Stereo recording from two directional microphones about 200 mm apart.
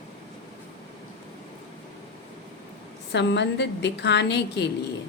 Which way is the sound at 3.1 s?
60° left (ahead or behind).